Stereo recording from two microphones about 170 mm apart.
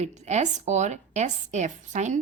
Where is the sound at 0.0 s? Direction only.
40° right (ahead or behind).